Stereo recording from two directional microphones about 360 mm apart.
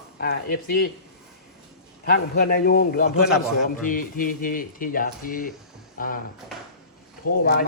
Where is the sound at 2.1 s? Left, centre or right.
Left.